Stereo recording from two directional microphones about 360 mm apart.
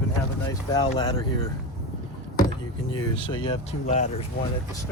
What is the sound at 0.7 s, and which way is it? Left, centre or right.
Speech, centre.